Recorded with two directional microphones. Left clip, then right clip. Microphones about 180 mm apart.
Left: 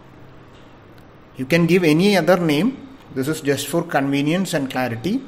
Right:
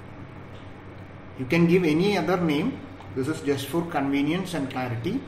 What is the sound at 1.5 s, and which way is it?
Speech, 55° left (ahead or behind).